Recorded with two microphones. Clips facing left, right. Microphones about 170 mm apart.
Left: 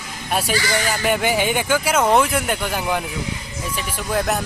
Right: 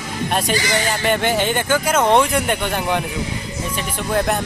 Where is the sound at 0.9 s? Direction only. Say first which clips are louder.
Right 1 dB; 5° left (ahead or behind).